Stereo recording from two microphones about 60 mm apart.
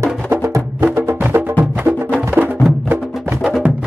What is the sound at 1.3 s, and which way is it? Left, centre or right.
Music, right.